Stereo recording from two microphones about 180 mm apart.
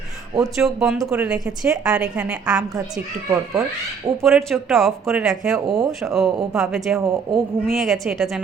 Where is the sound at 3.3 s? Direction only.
15° right (ahead or behind).